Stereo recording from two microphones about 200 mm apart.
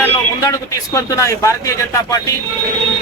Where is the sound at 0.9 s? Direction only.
15° left (ahead or behind).